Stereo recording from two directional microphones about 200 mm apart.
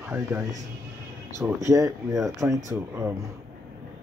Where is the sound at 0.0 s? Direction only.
10° right (ahead or behind).